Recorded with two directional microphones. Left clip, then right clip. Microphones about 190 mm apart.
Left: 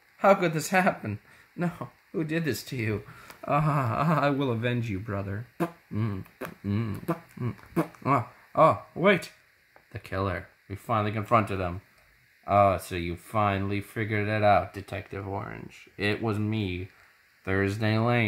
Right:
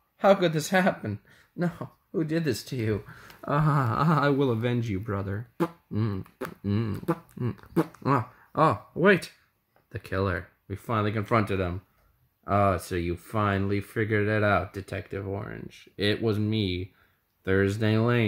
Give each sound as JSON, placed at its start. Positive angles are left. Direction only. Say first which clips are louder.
{"t": 0.2, "sound": "speech", "louder": "even", "side_deg": -15}
{"t": 9.9, "sound": "speech", "louder": "right 2 dB", "side_deg": -30}
{"t": 12.4, "sound": "speech", "louder": "left 3 dB", "side_deg": -25}